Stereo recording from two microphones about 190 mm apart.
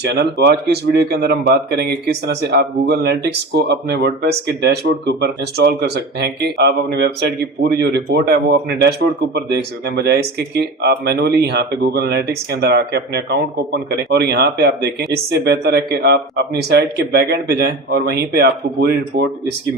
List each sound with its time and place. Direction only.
0.0 s speech: 60° right (ahead or behind)